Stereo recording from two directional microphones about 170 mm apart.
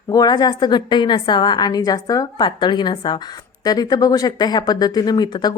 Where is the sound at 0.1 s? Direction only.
25° left (ahead or behind).